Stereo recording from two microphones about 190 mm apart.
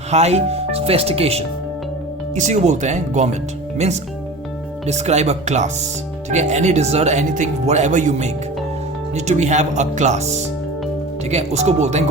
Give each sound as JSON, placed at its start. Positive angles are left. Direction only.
{"t": 0.1, "sound": "speech", "side_deg": -35}
{"t": 11.3, "sound": "speech", "side_deg": -35}